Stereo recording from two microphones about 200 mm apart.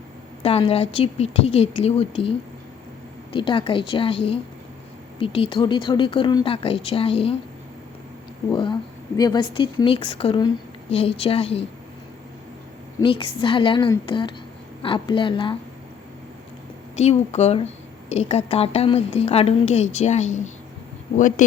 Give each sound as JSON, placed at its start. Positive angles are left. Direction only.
{"t": 0.4, "sound": "a woman's voice", "side_deg": 30}
{"t": 3.3, "sound": "a woman's voice", "side_deg": 25}
{"t": 9.1, "sound": "a woman's voice", "side_deg": 20}
{"t": 13.0, "sound": "a woman's voice", "side_deg": 25}
{"t": 16.9, "sound": "a woman's voice", "side_deg": 35}